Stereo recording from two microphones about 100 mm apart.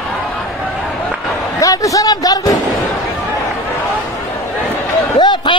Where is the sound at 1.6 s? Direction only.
35° left (ahead or behind).